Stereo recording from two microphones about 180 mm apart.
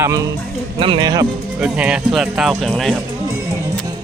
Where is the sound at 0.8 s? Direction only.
25° right (ahead or behind).